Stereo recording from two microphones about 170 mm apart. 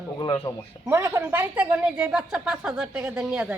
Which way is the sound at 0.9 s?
10° right (ahead or behind).